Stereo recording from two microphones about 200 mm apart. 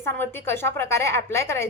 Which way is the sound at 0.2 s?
10° left (ahead or behind).